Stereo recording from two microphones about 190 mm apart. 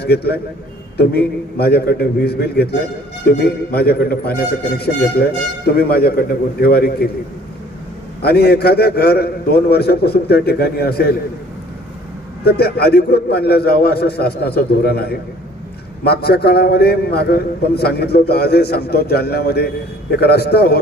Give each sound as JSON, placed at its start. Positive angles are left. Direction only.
{"t": 0.0, "sound": "a man's voice", "side_deg": 55}
{"t": 5.7, "sound": "a man's voice", "side_deg": 55}
{"t": 8.2, "sound": "a man's voice", "side_deg": 55}
{"t": 12.5, "sound": "a man's voice", "side_deg": 55}